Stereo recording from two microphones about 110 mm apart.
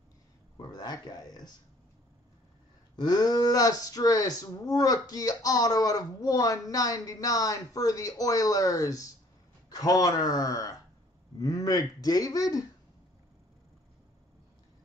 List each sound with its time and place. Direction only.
0.6 s speech: 35° left (ahead or behind)
3.0 s speech: 40° left (ahead or behind)